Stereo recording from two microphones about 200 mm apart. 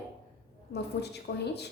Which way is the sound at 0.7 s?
55° left (ahead or behind).